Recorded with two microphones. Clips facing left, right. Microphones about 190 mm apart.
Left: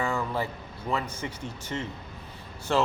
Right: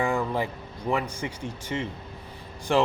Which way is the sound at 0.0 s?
15° right (ahead or behind).